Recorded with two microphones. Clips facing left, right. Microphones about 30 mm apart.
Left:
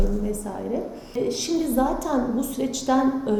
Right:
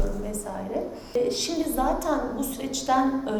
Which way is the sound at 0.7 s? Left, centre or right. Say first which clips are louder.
Right 2 dB; centre.